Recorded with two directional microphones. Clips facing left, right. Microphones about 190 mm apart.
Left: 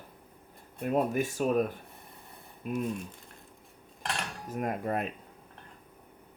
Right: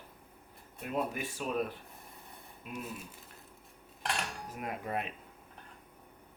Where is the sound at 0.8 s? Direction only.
45° left (ahead or behind).